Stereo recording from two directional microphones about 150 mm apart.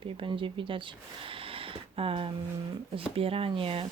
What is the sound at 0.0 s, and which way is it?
Speech, 35° right (ahead or behind).